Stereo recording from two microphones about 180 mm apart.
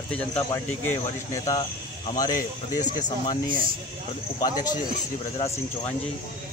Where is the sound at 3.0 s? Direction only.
25° left (ahead or behind).